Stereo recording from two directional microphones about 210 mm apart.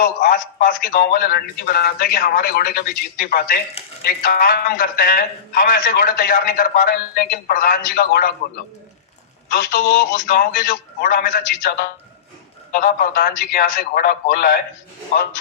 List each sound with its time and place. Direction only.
0.0 s a man's voice: 40° left (ahead or behind)